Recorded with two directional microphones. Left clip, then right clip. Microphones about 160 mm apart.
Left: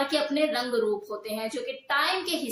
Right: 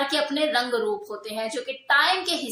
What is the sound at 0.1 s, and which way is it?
A woman's voice, 15° left (ahead or behind).